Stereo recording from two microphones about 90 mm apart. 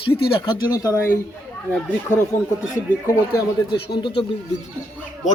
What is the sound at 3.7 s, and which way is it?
Speech, 65° left (ahead or behind).